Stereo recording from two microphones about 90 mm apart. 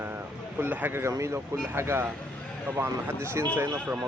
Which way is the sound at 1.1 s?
35° right (ahead or behind).